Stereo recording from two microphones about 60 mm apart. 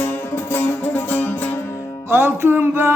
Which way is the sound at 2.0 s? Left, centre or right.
Right.